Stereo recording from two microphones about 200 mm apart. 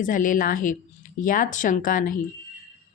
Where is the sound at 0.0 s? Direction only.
40° left (ahead or behind).